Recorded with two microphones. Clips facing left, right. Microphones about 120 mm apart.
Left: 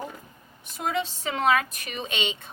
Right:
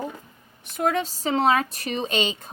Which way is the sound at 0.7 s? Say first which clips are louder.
Right 5 dB; 55° right (ahead or behind).